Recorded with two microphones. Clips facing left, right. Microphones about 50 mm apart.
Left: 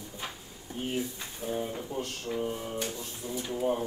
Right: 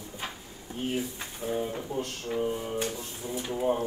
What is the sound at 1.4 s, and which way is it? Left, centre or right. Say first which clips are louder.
Speech: right 2 dB; centre.